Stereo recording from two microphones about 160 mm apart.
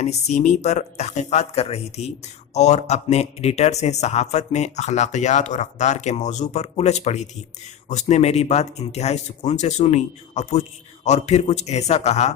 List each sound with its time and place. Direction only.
0.0 s speech: 45° left (ahead or behind)